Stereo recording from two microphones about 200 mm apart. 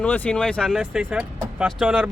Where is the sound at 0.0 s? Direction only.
5° left (ahead or behind).